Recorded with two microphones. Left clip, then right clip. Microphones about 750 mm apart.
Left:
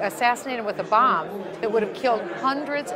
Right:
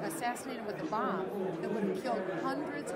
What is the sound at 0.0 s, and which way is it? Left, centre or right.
A woman's voice, left.